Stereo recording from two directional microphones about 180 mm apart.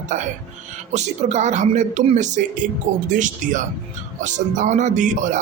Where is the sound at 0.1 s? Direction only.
45° right (ahead or behind).